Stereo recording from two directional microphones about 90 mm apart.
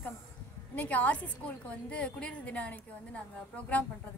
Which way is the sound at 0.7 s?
15° left (ahead or behind).